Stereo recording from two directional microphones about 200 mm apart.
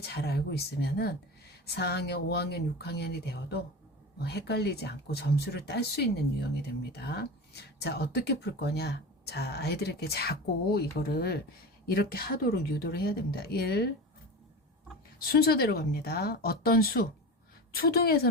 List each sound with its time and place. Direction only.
0.0 s speech: 55° left (ahead or behind)
15.2 s speech: 50° left (ahead or behind)